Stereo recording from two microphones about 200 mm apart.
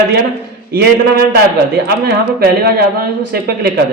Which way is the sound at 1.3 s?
55° right (ahead or behind).